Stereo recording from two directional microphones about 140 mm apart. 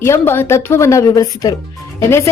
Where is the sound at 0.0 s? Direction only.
15° left (ahead or behind).